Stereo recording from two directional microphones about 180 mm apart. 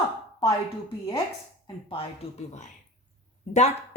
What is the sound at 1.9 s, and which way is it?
Speech, 40° left (ahead or behind).